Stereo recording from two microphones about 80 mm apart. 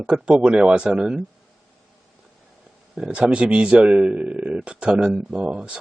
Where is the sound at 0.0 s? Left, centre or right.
Centre.